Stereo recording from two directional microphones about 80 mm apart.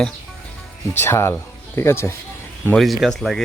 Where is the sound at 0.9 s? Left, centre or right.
Left.